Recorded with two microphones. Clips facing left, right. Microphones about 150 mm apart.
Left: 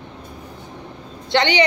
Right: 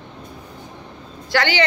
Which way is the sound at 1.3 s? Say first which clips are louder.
Left 2 dB; 20° left (ahead or behind).